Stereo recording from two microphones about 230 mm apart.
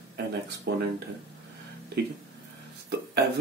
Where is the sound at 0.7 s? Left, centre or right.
Right.